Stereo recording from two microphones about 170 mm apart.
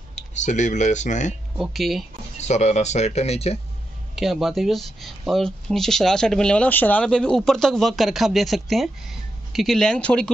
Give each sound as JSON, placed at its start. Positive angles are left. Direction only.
{"t": 0.1, "sound": "speech", "side_deg": 45}
{"t": 1.6, "sound": "speech", "side_deg": 0}
{"t": 2.3, "sound": "speech", "side_deg": 40}
{"t": 4.1, "sound": "speech", "side_deg": 0}